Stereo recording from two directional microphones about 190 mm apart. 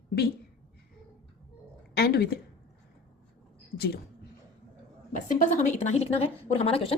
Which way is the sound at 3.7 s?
55° left (ahead or behind).